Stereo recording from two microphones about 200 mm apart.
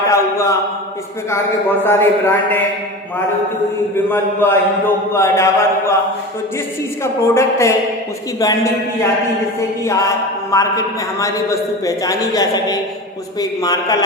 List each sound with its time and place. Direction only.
0.1 s a sound: 15° left (ahead or behind)
1.8 s a man's voice: 10° left (ahead or behind)
3.9 s a man's voice: 10° left (ahead or behind)
7.0 s a man's voice: 15° left (ahead or behind)
9.6 s a man's voice: 15° left (ahead or behind)